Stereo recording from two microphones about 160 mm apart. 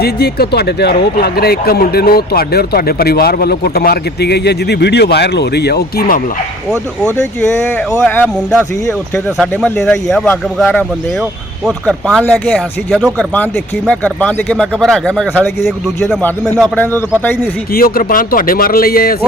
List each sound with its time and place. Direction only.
0.0 s speech: 75° left (ahead or behind)
6.7 s speech: 5° left (ahead or behind)
16.6 s a man's voice: 10° left (ahead or behind)
17.7 s speech: 65° left (ahead or behind)